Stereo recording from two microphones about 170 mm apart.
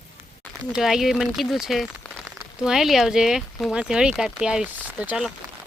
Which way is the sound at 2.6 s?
5° right (ahead or behind).